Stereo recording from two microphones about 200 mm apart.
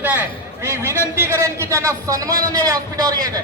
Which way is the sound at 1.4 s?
15° right (ahead or behind).